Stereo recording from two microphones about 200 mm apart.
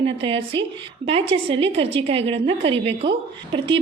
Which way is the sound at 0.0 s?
25° right (ahead or behind).